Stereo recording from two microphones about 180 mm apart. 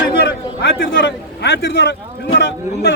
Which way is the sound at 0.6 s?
65° left (ahead or behind).